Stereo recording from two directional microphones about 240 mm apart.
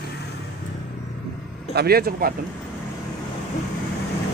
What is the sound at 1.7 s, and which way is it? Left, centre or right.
Speech, right.